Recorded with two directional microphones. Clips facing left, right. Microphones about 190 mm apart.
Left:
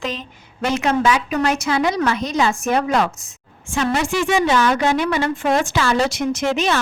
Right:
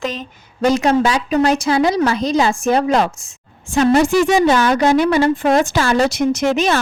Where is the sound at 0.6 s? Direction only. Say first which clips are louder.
Right 4 dB; 35° right (ahead or behind).